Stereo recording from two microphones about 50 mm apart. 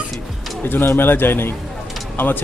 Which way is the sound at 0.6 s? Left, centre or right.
Left.